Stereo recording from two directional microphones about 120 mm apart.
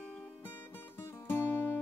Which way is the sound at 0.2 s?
15° left (ahead or behind).